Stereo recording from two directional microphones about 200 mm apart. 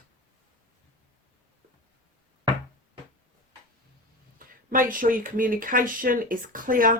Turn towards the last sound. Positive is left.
turn(degrees=-45)  # may be behind; listen again after turning